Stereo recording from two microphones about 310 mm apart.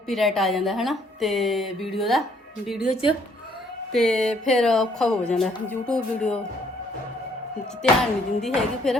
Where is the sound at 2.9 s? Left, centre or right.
Centre.